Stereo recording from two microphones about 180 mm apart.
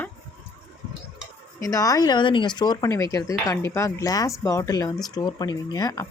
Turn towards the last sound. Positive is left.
turn(degrees=20)  # may be behind; listen again after turning